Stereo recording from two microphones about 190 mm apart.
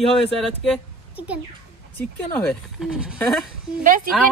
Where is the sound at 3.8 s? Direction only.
45° right (ahead or behind).